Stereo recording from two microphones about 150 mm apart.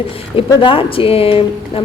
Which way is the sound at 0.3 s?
35° left (ahead or behind).